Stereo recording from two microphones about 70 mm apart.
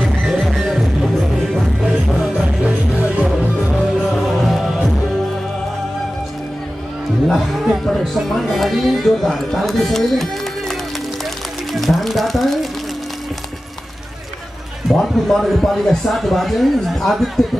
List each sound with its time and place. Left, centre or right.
0.2 s music: centre
2.6 s music: centre
4.1 s music: centre
7.2 s music: centre
11.7 s a sound: centre
14.9 s a man's voice: centre